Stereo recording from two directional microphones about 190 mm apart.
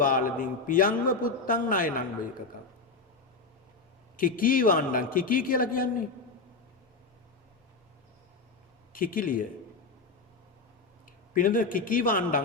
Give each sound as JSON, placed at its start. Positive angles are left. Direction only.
{"t": 0.0, "sound": "a man's voice", "side_deg": 45}
{"t": 4.2, "sound": "a man's voice", "side_deg": 45}
{"t": 8.9, "sound": "speech", "side_deg": 45}
{"t": 11.3, "sound": "a man's voice", "side_deg": 45}